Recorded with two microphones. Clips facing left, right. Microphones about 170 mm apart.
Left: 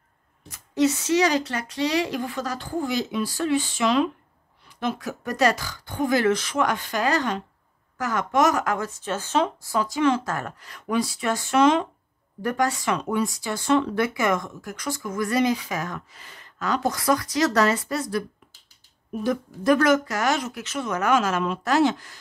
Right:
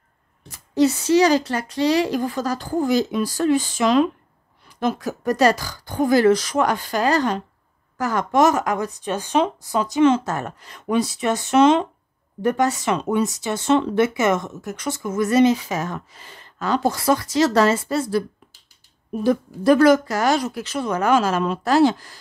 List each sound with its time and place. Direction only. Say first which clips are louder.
0.5 s speech: right 3 dB; 35° right (ahead or behind)
19.2 s speech: right 5 dB; 30° right (ahead or behind)